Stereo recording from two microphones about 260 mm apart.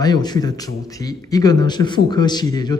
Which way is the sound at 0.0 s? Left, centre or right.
Centre.